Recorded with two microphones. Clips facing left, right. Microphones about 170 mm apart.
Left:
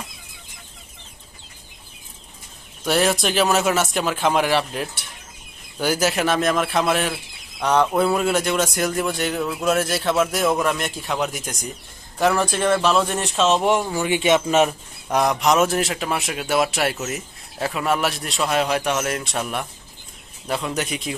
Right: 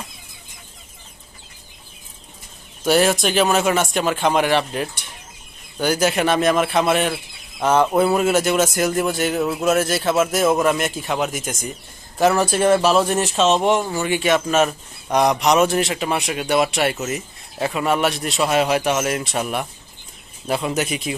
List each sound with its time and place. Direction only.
2.8 s a man's voice: centre (ahead or behind)
14.1 s speech: 20° left (ahead or behind)
15.1 s a man's voice: centre (ahead or behind)
20.5 s speech: 10° right (ahead or behind)